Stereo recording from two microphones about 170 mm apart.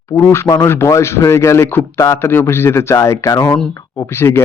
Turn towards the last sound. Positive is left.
turn(degrees=15)  # may be behind; listen again after turning